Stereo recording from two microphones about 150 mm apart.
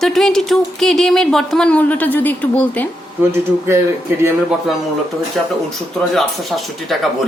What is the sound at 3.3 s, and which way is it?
Speech, 15° right (ahead or behind).